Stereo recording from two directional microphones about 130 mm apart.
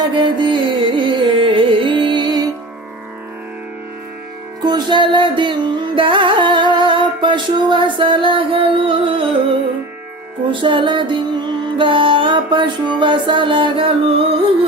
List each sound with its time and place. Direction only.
0.1 s music: 35° right (ahead or behind)
4.6 s music: 35° right (ahead or behind)
10.5 s music: 40° right (ahead or behind)